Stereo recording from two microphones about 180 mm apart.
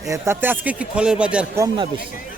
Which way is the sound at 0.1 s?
10° right (ahead or behind).